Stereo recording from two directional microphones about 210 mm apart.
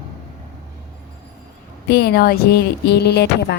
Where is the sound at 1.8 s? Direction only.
50° left (ahead or behind).